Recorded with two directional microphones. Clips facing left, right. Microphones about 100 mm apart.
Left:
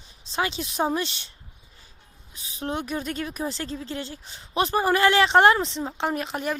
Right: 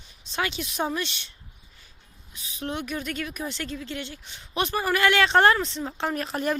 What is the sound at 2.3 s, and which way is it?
Speech, 30° left (ahead or behind).